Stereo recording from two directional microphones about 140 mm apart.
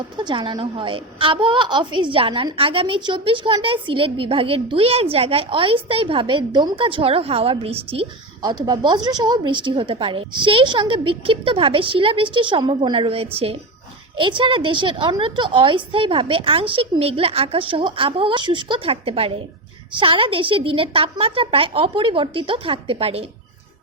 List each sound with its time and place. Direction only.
0.2 s a woman's voice: 35° right (ahead or behind)
8.4 s a woman's voice: 30° right (ahead or behind)